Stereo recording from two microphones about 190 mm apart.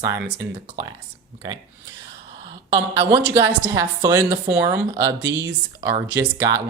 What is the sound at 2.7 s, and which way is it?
A woman's voice, 20° right (ahead or behind).